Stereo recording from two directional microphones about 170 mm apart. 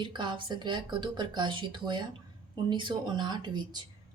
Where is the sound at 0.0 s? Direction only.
30° right (ahead or behind).